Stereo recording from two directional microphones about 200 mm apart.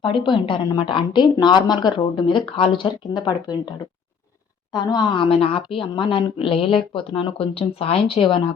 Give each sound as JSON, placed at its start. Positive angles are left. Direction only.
{"t": 0.1, "sound": "a woman's voice", "side_deg": 25}